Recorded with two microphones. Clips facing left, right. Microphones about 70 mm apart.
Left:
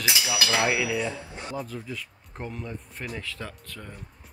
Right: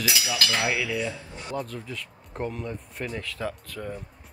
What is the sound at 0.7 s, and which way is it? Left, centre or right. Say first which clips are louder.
Speech: left 1 dB; centre.